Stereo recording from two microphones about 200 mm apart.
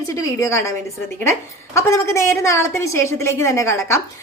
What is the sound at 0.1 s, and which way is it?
Speech, 15° left (ahead or behind).